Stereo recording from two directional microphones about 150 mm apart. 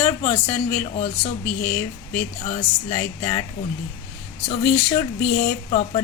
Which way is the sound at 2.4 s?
45° left (ahead or behind).